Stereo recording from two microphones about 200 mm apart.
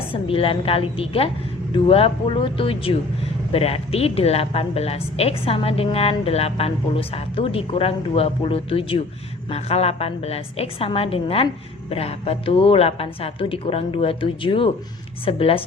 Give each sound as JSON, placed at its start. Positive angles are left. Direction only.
{"t": 0.1, "sound": "a woman's voice", "side_deg": 30}